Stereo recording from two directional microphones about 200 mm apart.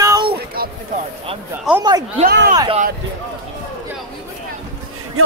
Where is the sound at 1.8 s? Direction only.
20° right (ahead or behind).